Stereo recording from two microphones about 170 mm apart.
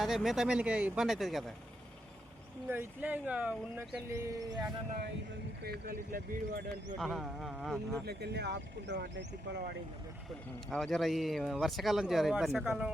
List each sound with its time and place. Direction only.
0.0 s speech: centre (ahead or behind)
2.6 s speech: 10° right (ahead or behind)
4.1 s speech: 20° right (ahead or behind)
5.6 s speech: 65° right (ahead or behind)
7.0 s speech: centre (ahead or behind)
8.0 s speech: 75° right (ahead or behind)
10.7 s speech: centre (ahead or behind)